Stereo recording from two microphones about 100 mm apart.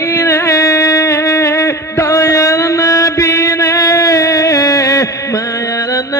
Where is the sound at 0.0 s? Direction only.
25° left (ahead or behind).